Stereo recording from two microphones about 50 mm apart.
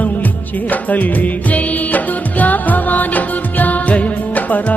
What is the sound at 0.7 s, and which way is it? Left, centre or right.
Music, left.